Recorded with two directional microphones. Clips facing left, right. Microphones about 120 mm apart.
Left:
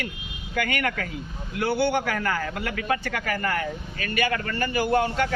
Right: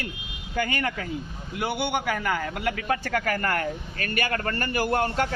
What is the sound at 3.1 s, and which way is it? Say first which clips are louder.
A man's voice: right 1 dB; 45° right (ahead or behind).